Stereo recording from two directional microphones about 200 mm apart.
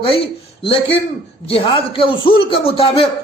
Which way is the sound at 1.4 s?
25° left (ahead or behind).